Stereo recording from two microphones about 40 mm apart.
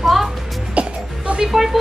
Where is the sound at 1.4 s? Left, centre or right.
Centre.